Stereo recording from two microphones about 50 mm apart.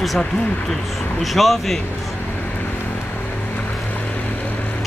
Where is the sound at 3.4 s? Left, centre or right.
Left.